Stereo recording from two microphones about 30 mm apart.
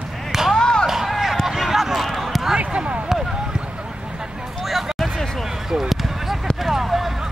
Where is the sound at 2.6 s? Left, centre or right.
Right.